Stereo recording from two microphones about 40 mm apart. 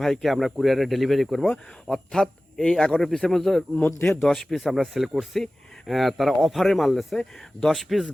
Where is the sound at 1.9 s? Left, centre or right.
Centre.